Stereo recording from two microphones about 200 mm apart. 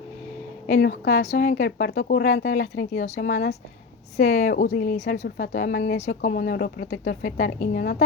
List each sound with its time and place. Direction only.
0.8 s a woman's voice: 55° left (ahead or behind)
1.2 s a woman's voice: 40° left (ahead or behind)
5.5 s speech: 50° left (ahead or behind)